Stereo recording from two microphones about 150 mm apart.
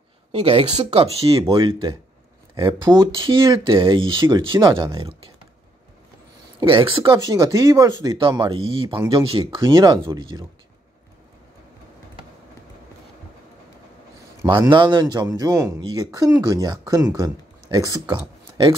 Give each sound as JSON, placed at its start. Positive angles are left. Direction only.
{"t": 0.3, "sound": "speech", "side_deg": -40}
{"t": 1.6, "sound": "speech", "side_deg": -30}
{"t": 6.6, "sound": "speech", "side_deg": -35}
{"t": 14.7, "sound": "speech", "side_deg": -30}